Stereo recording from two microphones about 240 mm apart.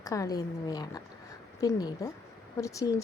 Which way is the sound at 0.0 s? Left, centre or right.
Centre.